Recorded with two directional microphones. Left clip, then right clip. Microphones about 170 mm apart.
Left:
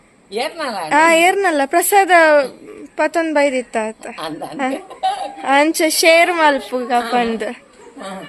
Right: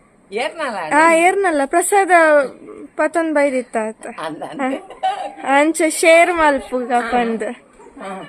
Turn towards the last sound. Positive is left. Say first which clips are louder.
# left 1 dB
turn(degrees=-10)  # may be behind; listen again after turning